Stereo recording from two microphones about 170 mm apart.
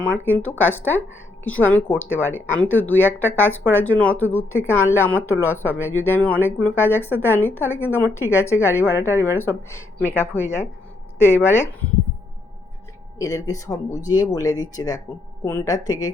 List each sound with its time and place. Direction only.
0.3 s speech: 10° left (ahead or behind)
9.0 s speech: 15° right (ahead or behind)
9.4 s speech: 15° left (ahead or behind)
13.1 s speech: 20° left (ahead or behind)